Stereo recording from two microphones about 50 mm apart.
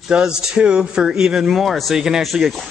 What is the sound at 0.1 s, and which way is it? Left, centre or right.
A man's voice, centre.